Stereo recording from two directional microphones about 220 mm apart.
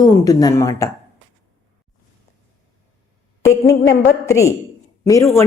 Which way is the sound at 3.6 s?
50° left (ahead or behind).